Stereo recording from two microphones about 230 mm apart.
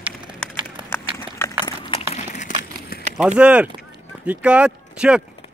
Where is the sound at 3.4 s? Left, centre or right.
Centre.